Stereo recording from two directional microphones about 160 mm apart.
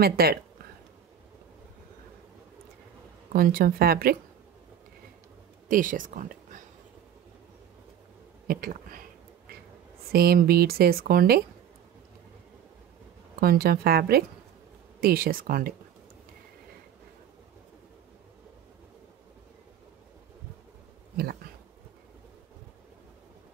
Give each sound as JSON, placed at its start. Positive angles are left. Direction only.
{"t": 0.0, "sound": "speech", "side_deg": -75}
{"t": 3.3, "sound": "speech", "side_deg": -65}
{"t": 5.7, "sound": "speech", "side_deg": -60}
{"t": 8.5, "sound": "speech", "side_deg": -65}
{"t": 10.1, "sound": "speech", "side_deg": -75}
{"t": 13.4, "sound": "speech", "side_deg": -70}